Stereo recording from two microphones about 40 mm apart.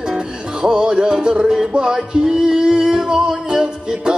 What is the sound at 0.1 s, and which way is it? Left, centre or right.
Music, centre.